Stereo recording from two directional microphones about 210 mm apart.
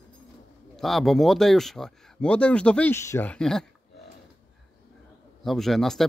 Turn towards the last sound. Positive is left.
turn(degrees=0)  # may be behind; listen again after turning